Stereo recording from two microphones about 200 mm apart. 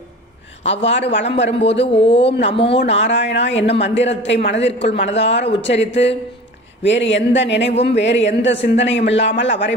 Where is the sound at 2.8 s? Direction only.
65° left (ahead or behind).